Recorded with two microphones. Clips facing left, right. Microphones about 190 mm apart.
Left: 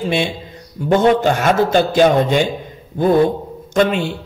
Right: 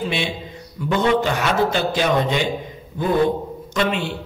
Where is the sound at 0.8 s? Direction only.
45° left (ahead or behind).